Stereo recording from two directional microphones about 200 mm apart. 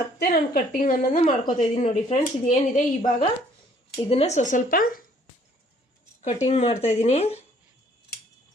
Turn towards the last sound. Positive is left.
turn(degrees=30)  # may be behind; listen again after turning